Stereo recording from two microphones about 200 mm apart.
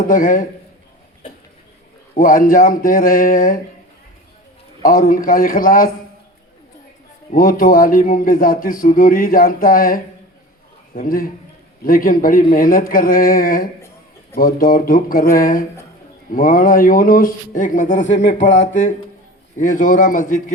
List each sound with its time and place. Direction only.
0.1 s speech: 40° left (ahead or behind)
2.1 s speech: 45° left (ahead or behind)
4.8 s speech: 45° left (ahead or behind)
7.3 s a man's voice: 45° left (ahead or behind)